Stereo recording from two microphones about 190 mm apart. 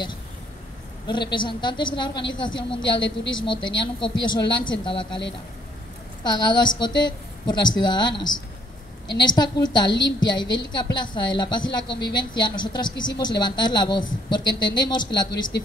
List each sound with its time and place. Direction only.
1.0 s a woman's voice: 25° left (ahead or behind)
6.2 s a woman's voice: 20° left (ahead or behind)